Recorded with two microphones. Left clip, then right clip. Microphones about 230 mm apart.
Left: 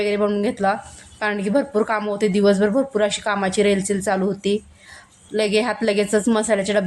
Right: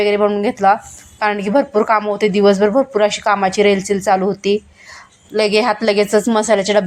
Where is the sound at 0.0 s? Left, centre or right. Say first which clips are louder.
Right 6 dB; centre.